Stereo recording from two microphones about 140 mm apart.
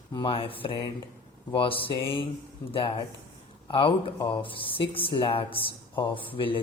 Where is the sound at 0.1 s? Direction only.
35° left (ahead or behind).